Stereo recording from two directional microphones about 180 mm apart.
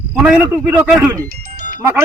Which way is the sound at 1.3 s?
50° right (ahead or behind).